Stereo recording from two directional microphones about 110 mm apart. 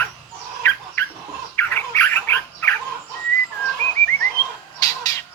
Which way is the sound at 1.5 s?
20° left (ahead or behind).